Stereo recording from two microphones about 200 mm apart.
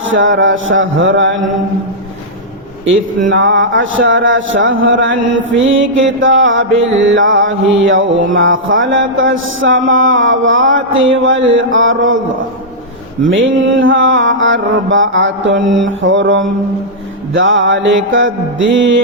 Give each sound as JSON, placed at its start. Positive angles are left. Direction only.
{"t": 0.1, "sound": "mantra", "side_deg": -75}
{"t": 3.2, "sound": "mantra", "side_deg": -70}